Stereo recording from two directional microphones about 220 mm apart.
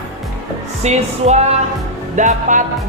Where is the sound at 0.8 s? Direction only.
30° right (ahead or behind).